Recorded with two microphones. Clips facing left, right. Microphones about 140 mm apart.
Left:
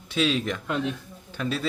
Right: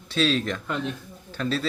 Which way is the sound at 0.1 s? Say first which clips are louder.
Right 1 dB; 15° left (ahead or behind).